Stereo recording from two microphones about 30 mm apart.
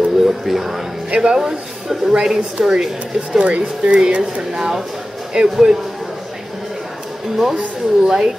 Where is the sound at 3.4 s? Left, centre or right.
Right.